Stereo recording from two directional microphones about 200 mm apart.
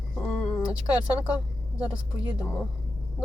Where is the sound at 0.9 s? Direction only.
5° right (ahead or behind).